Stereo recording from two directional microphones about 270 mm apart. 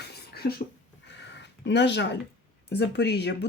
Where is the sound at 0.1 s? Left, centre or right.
Left.